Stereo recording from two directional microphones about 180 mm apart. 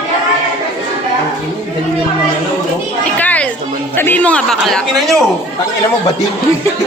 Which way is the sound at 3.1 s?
10° left (ahead or behind).